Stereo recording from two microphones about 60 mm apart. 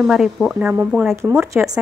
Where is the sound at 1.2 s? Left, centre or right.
Right.